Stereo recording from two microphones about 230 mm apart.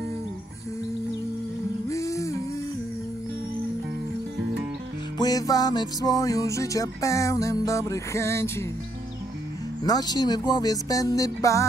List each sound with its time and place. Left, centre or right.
1.9 s music: centre
5.2 s music: centre
9.8 s music: centre